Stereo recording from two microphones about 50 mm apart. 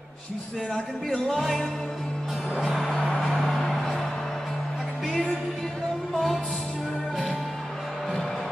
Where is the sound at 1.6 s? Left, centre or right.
Centre.